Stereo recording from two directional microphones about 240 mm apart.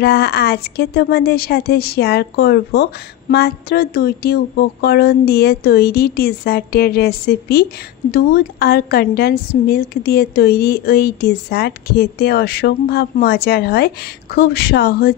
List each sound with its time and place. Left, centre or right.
0.0 s speech: left